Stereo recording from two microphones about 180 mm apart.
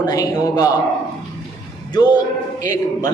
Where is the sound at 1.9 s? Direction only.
20° left (ahead or behind).